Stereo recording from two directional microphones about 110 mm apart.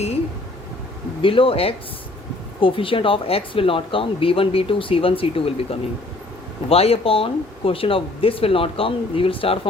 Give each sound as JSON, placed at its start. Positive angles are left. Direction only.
{"t": 1.2, "sound": "speech", "side_deg": 55}
{"t": 6.7, "sound": "speech", "side_deg": 65}